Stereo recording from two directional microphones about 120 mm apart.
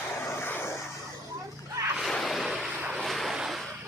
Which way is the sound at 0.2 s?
20° left (ahead or behind).